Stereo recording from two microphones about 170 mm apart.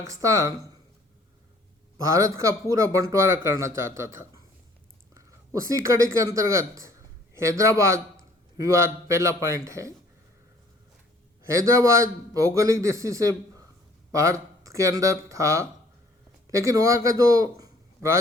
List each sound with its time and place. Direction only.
0.0 s speech: 20° right (ahead or behind)
2.1 s a man's voice: 20° right (ahead or behind)
5.6 s a man's voice: 20° right (ahead or behind)
11.4 s a man's voice: 15° right (ahead or behind)